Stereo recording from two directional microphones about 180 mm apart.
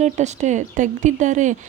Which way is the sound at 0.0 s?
40° right (ahead or behind).